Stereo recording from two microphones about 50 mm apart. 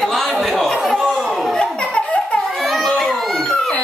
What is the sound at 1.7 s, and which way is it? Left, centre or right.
Baby laughter, left.